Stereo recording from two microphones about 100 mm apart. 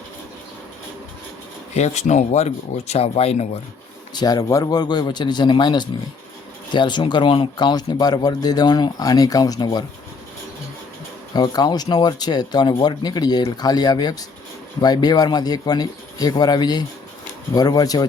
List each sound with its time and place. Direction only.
2.3 s speech: 90° left
4.1 s speech: 45° left (ahead or behind)
9.6 s speech: 50° left (ahead or behind)
11.3 s speech: 45° left (ahead or behind)